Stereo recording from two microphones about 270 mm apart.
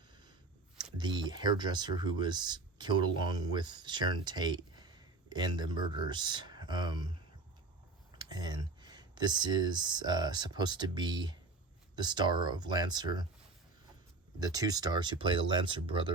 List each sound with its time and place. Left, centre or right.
0.9 s speech: centre
8.1 s speech: centre
14.3 s speech: centre